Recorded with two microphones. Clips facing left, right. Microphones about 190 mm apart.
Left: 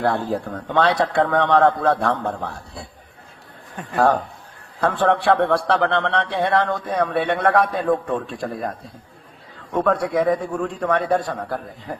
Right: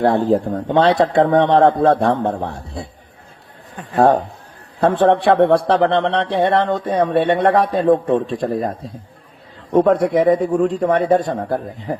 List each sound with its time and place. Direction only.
0.0 s a man's voice: 20° right (ahead or behind)
3.9 s a man's voice: 25° right (ahead or behind)
8.4 s a man's voice: centre (ahead or behind)
9.7 s a man's voice: 20° right (ahead or behind)